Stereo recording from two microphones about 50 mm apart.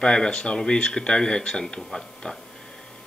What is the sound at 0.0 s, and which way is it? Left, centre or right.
Speech, centre.